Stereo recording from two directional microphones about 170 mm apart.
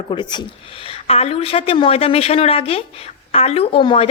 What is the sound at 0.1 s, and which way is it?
Speech, 25° left (ahead or behind).